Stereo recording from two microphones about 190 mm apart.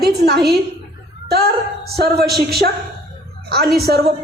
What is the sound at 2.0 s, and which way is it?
Speech, 55° right (ahead or behind).